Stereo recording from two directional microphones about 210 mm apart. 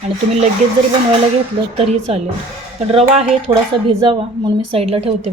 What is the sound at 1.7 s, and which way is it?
Speech, 30° right (ahead or behind).